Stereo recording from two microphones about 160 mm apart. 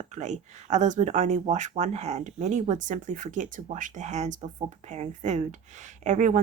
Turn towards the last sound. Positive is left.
turn(degrees=-50)  # may be behind; listen again after turning